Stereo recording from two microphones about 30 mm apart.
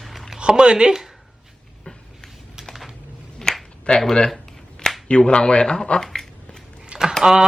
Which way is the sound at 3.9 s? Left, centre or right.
Left.